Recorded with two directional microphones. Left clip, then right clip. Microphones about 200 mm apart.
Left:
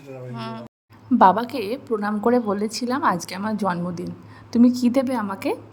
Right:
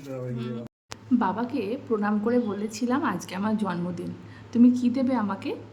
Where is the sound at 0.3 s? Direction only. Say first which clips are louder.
Left 3 dB; centre (ahead or behind).